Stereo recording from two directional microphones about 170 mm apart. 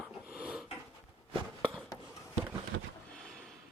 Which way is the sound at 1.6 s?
5° left (ahead or behind).